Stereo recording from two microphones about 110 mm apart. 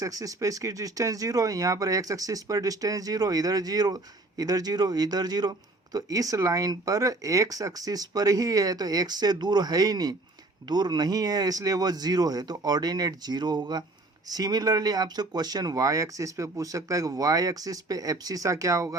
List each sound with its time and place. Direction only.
0.0 s speech: 30° right (ahead or behind)